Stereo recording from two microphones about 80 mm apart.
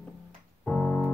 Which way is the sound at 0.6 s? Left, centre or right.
Centre.